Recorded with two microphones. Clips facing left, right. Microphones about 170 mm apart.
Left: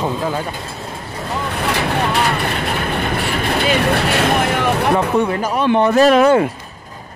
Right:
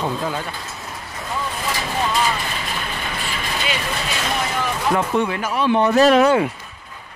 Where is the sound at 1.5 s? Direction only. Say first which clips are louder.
Left 8 dB; 65° left (ahead or behind).